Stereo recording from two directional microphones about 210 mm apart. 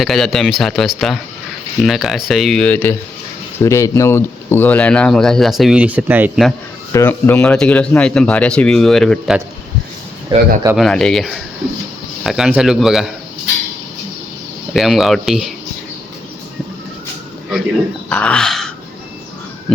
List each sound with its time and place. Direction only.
0.0 s speech: centre (ahead or behind)
6.9 s speech: 10° left (ahead or behind)
10.3 s speech: 20° right (ahead or behind)
10.8 s speech: 5° left (ahead or behind)
14.7 s speech: centre (ahead or behind)
18.1 s a sound: 5° left (ahead or behind)